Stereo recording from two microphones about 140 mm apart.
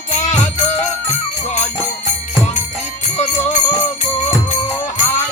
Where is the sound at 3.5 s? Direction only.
60° left (ahead or behind).